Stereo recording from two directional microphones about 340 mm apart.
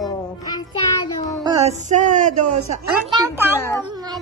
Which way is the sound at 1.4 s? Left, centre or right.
Centre.